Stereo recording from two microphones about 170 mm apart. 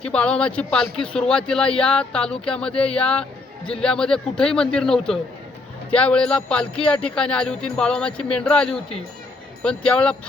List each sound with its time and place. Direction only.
0.0 s speech: 5° left (ahead or behind)